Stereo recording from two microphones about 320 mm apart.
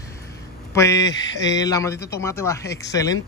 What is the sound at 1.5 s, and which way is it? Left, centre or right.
Speech, centre.